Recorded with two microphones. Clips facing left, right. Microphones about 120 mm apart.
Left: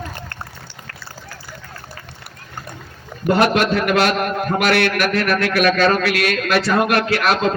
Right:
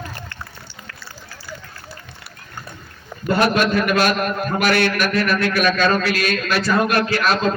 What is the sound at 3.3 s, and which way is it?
A man's voice, 70° left (ahead or behind).